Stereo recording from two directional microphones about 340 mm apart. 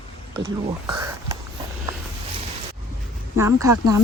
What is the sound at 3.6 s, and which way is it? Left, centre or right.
Speech, centre.